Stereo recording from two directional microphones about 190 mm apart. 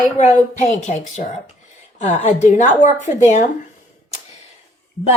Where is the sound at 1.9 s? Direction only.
40° left (ahead or behind).